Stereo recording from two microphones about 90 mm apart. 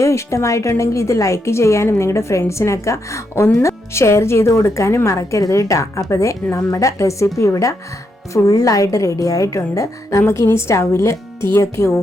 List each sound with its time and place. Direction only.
0.0 s a woman's voice: 35° left (ahead or behind)